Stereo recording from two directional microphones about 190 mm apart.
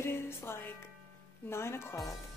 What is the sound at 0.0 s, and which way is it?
Music, 10° left (ahead or behind).